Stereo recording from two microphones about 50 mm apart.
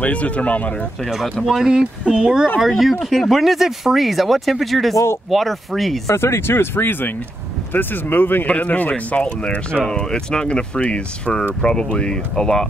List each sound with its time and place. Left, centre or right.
0.0 s speech: left
1.4 s speech: centre
1.7 s speech: centre
2.6 s speech: centre
4.9 s speech: left
5.3 s speech: centre
6.0 s speech: left
8.5 s speech: left; by 12.6 s centre